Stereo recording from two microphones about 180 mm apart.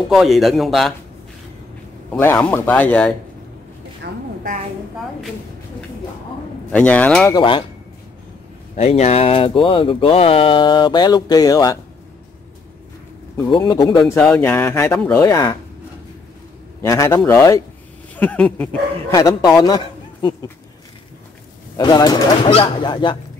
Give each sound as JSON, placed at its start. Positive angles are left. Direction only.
{"t": 0.1, "sound": "a man's voice", "side_deg": 0}
{"t": 2.0, "sound": "speech", "side_deg": 10}
{"t": 4.0, "sound": "a sound", "side_deg": -60}
{"t": 6.7, "sound": "speech", "side_deg": 5}
{"t": 7.3, "sound": "speech", "side_deg": 25}
{"t": 8.7, "sound": "speech", "side_deg": 35}
{"t": 13.5, "sound": "speech", "side_deg": 25}
{"t": 14.2, "sound": "speech", "side_deg": 10}
{"t": 16.8, "sound": "speech", "side_deg": 15}
{"t": 19.1, "sound": "a man's voice", "side_deg": 20}
{"t": 21.7, "sound": "speech", "side_deg": 25}